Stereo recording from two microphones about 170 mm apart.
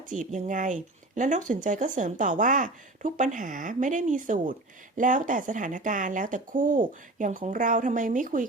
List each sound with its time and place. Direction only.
0.1 s speech: 50° right (ahead or behind)